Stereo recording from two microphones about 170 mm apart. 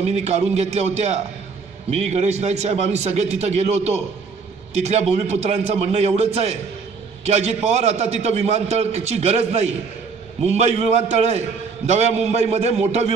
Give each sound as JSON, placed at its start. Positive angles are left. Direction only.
{"t": 0.0, "sound": "a man's voice", "side_deg": -40}